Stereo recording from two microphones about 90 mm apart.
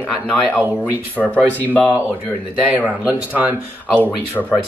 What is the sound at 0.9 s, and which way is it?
Speech, 20° right (ahead or behind).